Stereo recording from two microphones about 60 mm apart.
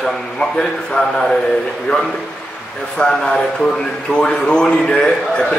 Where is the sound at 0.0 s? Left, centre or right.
Centre.